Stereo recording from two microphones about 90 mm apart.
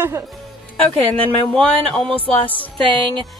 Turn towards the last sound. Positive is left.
turn(degrees=15)  # may be behind; listen again after turning